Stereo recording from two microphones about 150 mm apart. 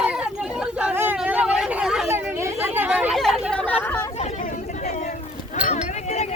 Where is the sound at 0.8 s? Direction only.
10° right (ahead or behind).